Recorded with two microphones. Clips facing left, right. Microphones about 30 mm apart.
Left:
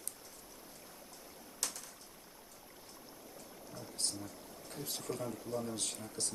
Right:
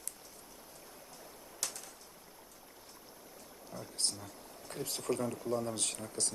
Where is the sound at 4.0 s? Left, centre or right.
Right.